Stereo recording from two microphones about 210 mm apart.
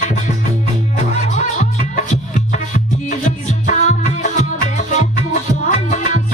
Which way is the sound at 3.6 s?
35° left (ahead or behind).